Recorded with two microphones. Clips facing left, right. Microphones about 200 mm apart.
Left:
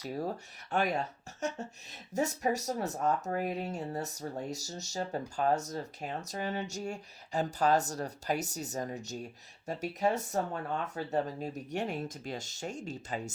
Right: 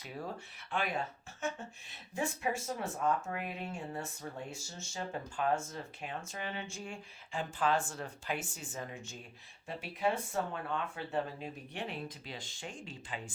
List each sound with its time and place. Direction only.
0.0 s speech: 40° left (ahead or behind)